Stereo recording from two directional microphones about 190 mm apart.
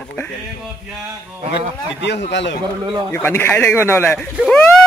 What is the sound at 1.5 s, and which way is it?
A man's voice, 65° left (ahead or behind).